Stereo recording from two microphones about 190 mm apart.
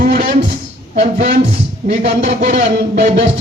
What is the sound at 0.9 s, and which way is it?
Music, 45° right (ahead or behind).